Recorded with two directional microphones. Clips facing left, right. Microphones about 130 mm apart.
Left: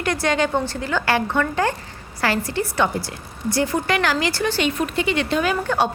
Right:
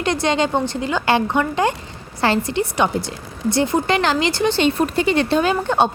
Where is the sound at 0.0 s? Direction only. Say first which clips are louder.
Right 2 dB; 20° right (ahead or behind).